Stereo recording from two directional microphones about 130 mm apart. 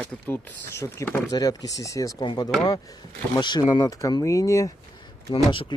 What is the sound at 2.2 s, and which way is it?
Speech, 40° left (ahead or behind).